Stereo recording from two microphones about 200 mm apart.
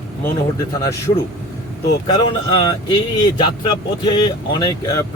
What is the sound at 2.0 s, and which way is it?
Speech, 25° left (ahead or behind).